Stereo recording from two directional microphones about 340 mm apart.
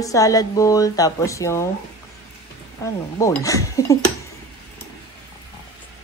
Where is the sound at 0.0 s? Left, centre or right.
Centre.